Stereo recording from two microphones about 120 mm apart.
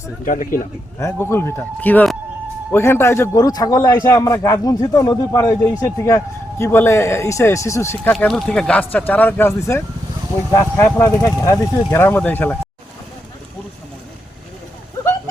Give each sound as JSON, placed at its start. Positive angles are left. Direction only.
{"t": 0.3, "sound": "speech", "side_deg": 90}
{"t": 0.9, "sound": "a man's voice", "side_deg": 20}
{"t": 6.6, "sound": "a man's voice", "side_deg": 20}
{"t": 8.1, "sound": "a man's voice", "side_deg": 5}